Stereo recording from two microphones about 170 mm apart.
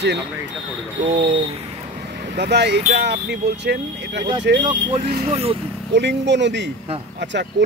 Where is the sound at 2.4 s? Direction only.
80° right.